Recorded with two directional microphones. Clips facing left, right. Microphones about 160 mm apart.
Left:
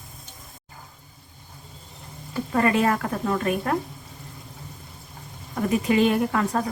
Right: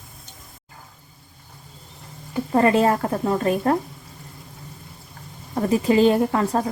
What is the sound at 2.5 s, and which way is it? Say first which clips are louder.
A woman's voice: right 4 dB; 30° right (ahead or behind).